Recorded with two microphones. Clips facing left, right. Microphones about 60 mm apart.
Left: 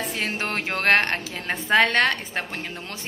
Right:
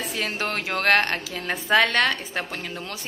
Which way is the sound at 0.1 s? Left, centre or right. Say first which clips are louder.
Even; left.